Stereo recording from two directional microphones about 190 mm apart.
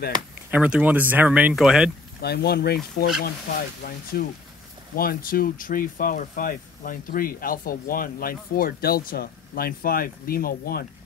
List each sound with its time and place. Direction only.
0.5 s speech: 5° right (ahead or behind)
2.2 s speech: 55° left (ahead or behind)